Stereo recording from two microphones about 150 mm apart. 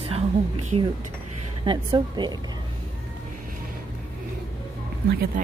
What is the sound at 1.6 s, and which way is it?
Speech, 30° right (ahead or behind).